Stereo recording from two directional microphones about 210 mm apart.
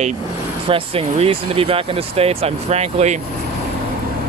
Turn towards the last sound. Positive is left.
turn(degrees=-30)  # may be behind; listen again after turning